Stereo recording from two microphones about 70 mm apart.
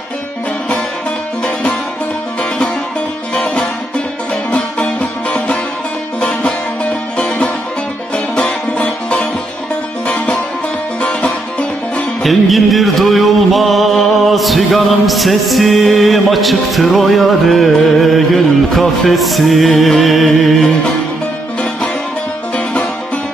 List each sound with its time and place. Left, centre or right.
4.5 s music: centre
8.7 s music: centre
12.2 s music: centre